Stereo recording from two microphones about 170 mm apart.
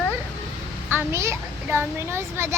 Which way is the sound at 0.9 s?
15° right (ahead or behind).